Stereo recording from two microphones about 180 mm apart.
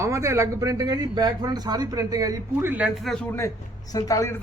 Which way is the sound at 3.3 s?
20° left (ahead or behind).